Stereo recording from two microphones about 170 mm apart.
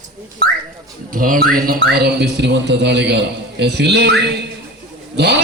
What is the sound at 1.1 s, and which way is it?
A man's voice, 55° right (ahead or behind).